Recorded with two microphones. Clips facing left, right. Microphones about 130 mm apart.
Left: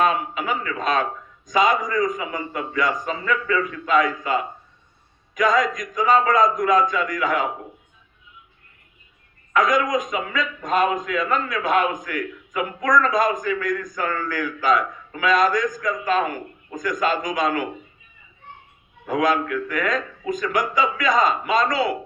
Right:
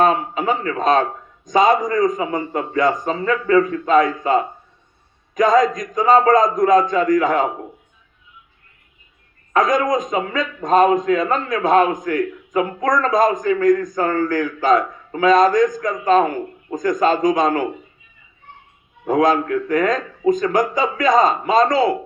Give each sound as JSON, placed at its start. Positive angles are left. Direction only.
{"t": 0.0, "sound": "a man's voice", "side_deg": -35}
{"t": 1.8, "sound": "a man's voice", "side_deg": -45}
{"t": 2.0, "sound": "a man's voice", "side_deg": -35}
{"t": 9.5, "sound": "a man's voice", "side_deg": -40}
{"t": 15.4, "sound": "a man's voice", "side_deg": -45}
{"t": 16.0, "sound": "a man's voice", "side_deg": -35}
{"t": 16.7, "sound": "a man's voice", "side_deg": -50}
{"t": 17.0, "sound": "a man's voice", "side_deg": -35}
{"t": 19.2, "sound": "a man's voice", "side_deg": -35}